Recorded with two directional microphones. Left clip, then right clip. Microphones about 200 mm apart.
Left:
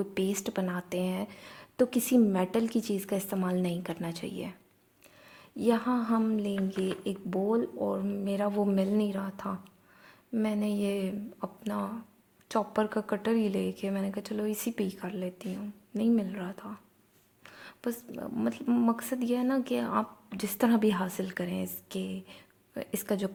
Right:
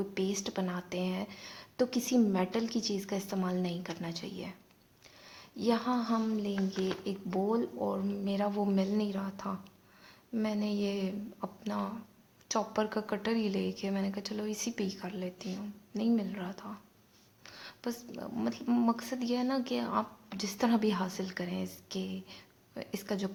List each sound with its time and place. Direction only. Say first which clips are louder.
0.0 s speech: left 3 dB; 25° left (ahead or behind)